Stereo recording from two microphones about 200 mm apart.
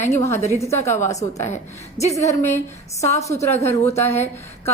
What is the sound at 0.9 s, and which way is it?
A woman's voice, 15° left (ahead or behind).